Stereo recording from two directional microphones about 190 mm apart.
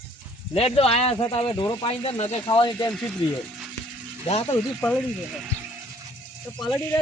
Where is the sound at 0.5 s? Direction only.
30° left (ahead or behind).